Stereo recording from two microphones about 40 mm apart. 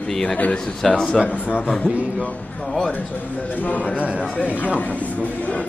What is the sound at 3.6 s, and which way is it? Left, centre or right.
Speech, left.